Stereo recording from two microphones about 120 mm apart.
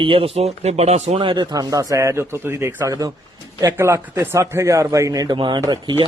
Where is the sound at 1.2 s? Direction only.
40° right (ahead or behind).